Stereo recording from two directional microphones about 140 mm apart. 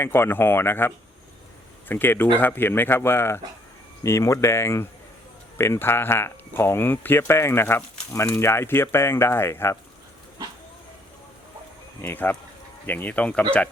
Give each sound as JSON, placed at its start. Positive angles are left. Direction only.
{"t": 0.0, "sound": "speech", "side_deg": 15}
{"t": 12.0, "sound": "speech", "side_deg": 15}